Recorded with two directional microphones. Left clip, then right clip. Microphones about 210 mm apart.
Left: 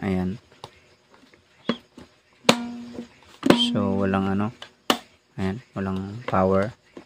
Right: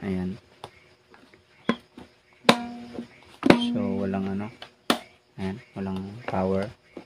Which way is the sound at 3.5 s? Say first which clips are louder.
Left 5 dB; 40° left (ahead or behind).